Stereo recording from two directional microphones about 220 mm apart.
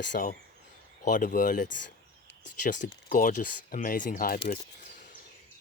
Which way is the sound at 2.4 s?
35° left (ahead or behind).